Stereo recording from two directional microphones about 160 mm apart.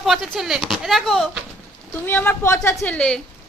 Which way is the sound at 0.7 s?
Centre (ahead or behind).